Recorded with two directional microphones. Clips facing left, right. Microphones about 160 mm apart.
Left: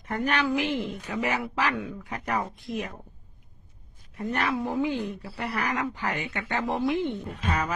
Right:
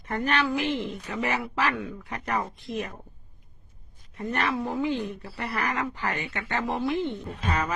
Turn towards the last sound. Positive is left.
turn(degrees=10)  # may be behind; listen again after turning